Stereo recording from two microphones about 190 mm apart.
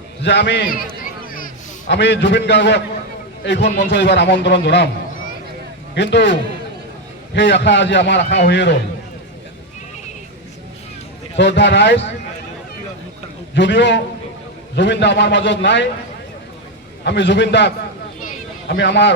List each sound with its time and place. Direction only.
0.2 s a man's voice: 65° left (ahead or behind)
1.9 s a man's voice: 65° left (ahead or behind)
5.9 s a man's voice: 65° left (ahead or behind)
11.3 s a man's voice: 65° left (ahead or behind)
13.5 s a man's voice: 70° left (ahead or behind)
17.0 s a man's voice: 65° left (ahead or behind)
18.2 s a sound: 45° left (ahead or behind)
18.8 s a man's voice: 65° left (ahead or behind)